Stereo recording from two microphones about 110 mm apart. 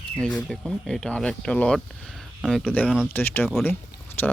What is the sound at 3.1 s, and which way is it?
Speech, 20° left (ahead or behind).